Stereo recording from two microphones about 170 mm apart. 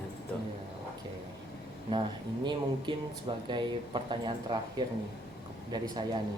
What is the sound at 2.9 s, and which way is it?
Speech, 30° right (ahead or behind).